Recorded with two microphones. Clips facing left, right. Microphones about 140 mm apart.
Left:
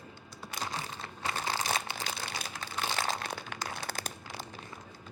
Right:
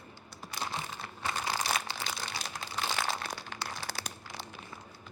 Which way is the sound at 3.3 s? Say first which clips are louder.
Left 2 dB; 60° left (ahead or behind).